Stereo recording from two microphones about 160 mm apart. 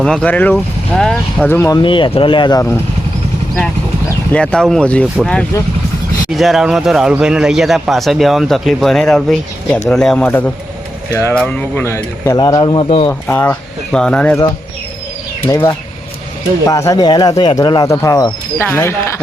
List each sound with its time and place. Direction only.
0.0 s speech: 5° left (ahead or behind)
1.5 s speech: 15° left (ahead or behind)
1.8 s speech: 30° left (ahead or behind)
4.3 s speech: 5° left (ahead or behind)
11.1 s speech: 20° left (ahead or behind)
12.4 s speech: 25° left (ahead or behind)
13.1 s speech: 10° left (ahead or behind)
15.4 s speech: 15° left (ahead or behind)